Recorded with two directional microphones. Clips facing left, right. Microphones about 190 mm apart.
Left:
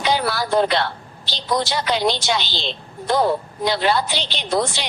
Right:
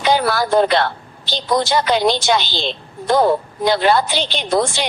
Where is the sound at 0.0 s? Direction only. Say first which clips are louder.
Right 4 dB; 50° right (ahead or behind).